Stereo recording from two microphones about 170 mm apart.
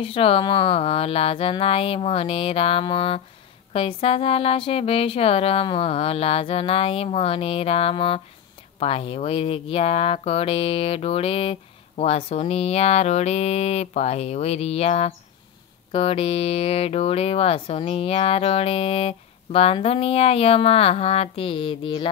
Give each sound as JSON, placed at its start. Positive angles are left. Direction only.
{"t": 0.0, "sound": "speech", "side_deg": 35}